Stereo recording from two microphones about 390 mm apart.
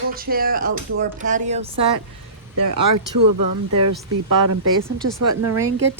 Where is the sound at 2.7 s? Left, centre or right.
Right.